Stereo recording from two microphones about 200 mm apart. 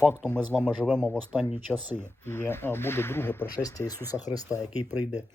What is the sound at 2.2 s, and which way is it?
Speech, 10° left (ahead or behind).